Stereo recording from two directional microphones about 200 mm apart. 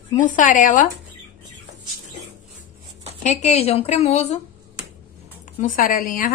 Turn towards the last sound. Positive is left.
turn(degrees=45)  # may be behind; listen again after turning